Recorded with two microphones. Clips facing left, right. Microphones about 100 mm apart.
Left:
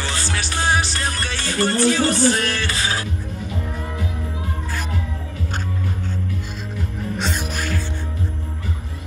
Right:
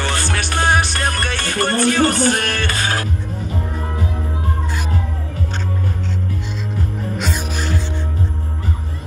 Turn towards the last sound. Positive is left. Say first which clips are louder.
# right 2 dB
turn(degrees=-20)  # may be behind; listen again after turning